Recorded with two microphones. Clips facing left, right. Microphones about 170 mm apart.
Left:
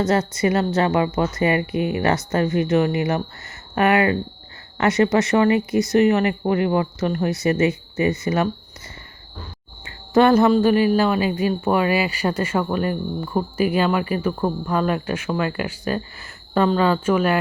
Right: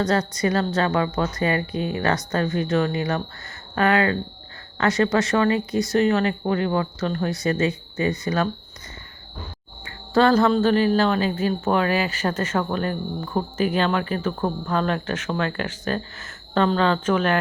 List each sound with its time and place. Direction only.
0.0 s speech: 20° left (ahead or behind)
9.8 s a woman's voice: 20° left (ahead or behind)